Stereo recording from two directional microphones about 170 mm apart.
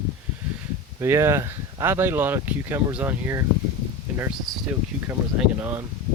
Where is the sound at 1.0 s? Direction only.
15° right (ahead or behind).